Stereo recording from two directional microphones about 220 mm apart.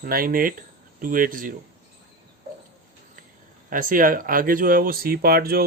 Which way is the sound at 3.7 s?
40° right (ahead or behind).